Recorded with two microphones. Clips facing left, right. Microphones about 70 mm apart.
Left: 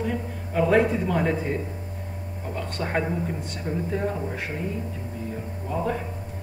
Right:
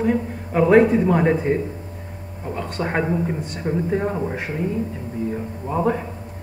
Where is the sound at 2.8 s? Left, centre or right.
Right.